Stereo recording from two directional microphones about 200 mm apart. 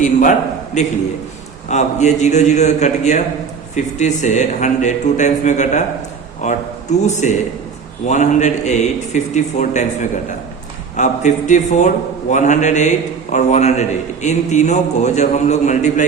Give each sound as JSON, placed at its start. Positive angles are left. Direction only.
{"t": 0.0, "sound": "a man's voice", "side_deg": 40}